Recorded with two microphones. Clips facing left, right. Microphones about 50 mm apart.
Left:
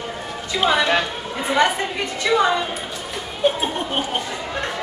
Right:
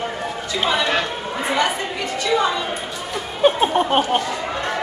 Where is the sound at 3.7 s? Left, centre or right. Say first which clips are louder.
Right 7 dB; right.